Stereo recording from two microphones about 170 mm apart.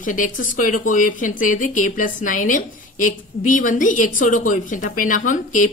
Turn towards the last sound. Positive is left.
turn(degrees=50)  # may be behind; listen again after turning